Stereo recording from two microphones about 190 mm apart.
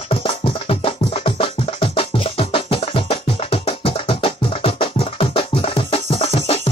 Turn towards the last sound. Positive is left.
turn(degrees=30)  # may be behind; listen again after turning